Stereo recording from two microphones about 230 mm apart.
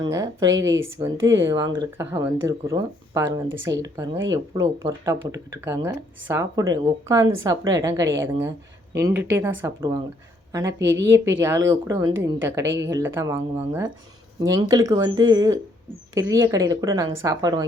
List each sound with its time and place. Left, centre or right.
0.0 s speech: centre
10.7 s a woman's voice: right
11.3 s speech: centre